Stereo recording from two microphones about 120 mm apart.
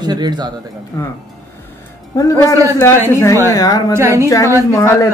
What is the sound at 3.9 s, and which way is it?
Speech, 25° right (ahead or behind).